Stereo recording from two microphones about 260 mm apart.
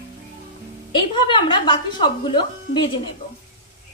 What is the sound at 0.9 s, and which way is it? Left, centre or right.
Speech, centre.